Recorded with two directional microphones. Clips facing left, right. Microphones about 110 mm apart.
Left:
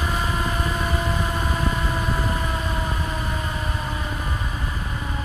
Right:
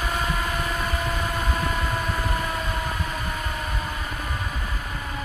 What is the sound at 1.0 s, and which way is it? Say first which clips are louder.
Vehicle: left 2 dB; 15° left (ahead or behind).